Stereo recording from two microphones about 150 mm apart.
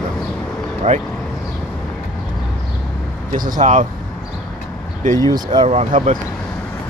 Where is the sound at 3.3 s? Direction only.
60° right (ahead or behind).